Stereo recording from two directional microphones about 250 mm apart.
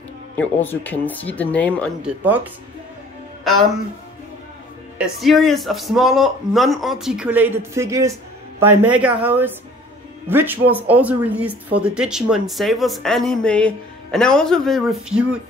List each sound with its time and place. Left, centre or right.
0.4 s speech: centre
4.9 s speech: centre